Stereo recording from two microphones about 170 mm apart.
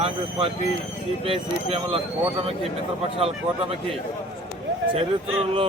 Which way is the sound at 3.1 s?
35° right (ahead or behind).